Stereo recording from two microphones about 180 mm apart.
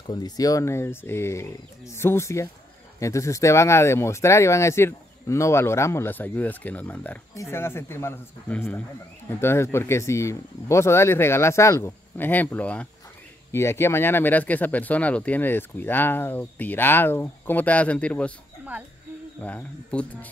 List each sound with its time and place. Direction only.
0.1 s speech: 20° left (ahead or behind)
19.4 s speech: 5° left (ahead or behind)